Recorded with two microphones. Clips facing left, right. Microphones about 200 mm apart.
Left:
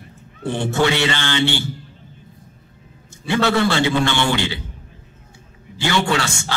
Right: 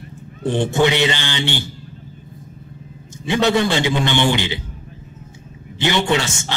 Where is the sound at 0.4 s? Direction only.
15° right (ahead or behind).